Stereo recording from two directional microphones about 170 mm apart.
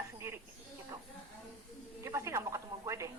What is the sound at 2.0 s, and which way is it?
A man's voice, 15° right (ahead or behind).